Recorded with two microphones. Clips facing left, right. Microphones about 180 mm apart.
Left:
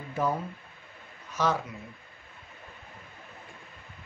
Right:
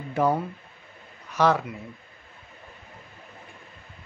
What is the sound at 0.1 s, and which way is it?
Speech, 65° right (ahead or behind).